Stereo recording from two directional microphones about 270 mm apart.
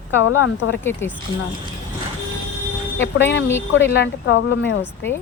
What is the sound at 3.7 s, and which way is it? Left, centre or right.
Speech, left.